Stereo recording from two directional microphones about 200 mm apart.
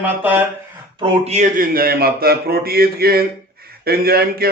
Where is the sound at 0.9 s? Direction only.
25° right (ahead or behind).